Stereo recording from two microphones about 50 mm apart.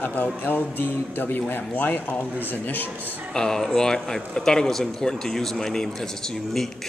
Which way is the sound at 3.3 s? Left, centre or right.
Centre.